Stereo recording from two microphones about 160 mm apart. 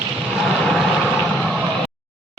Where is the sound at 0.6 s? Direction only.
5° left (ahead or behind).